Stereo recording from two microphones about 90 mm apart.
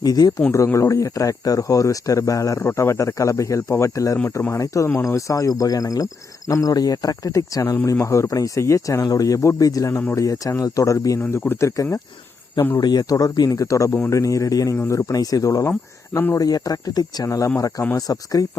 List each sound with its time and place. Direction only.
0.0 s speech: 45° left (ahead or behind)
0.5 s speech: 35° left (ahead or behind)
11.2 s speech: 25° left (ahead or behind)
12.8 s speech: 50° left (ahead or behind)
16.1 s speech: 30° left (ahead or behind)
16.4 s speech: 45° left (ahead or behind)
17.2 s speech: 35° left (ahead or behind)